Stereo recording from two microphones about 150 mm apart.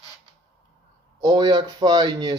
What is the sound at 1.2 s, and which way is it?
Speech, 25° right (ahead or behind).